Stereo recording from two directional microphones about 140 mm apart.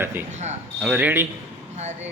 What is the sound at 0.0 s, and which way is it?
Speech, 15° right (ahead or behind).